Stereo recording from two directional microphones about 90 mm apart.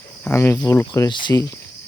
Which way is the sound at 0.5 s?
40° left (ahead or behind).